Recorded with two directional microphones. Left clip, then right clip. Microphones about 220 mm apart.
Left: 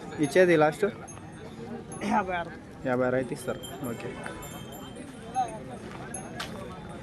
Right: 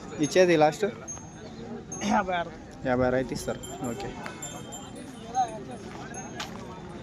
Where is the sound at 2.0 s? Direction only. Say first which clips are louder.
Right 2 dB; 30° right (ahead or behind).